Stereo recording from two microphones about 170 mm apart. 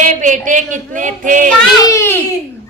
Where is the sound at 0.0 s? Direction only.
50° right (ahead or behind).